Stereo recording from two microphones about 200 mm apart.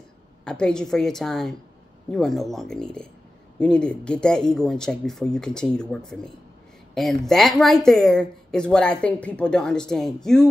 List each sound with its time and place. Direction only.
0.5 s speech: 5° left (ahead or behind)